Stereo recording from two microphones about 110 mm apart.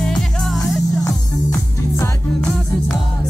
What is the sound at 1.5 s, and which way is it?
Music, 25° left (ahead or behind).